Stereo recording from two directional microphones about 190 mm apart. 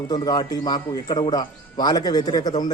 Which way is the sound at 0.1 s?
20° left (ahead or behind).